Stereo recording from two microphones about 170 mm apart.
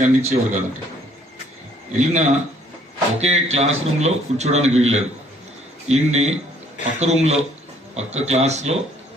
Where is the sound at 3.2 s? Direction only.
40° right (ahead or behind).